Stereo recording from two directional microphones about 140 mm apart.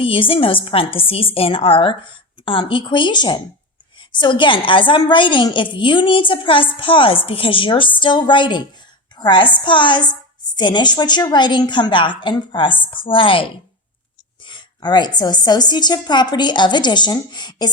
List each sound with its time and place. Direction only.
0.0 s a woman's voice: 40° left (ahead or behind)